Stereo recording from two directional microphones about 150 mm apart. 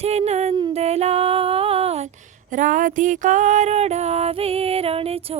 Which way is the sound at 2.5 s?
60° right (ahead or behind).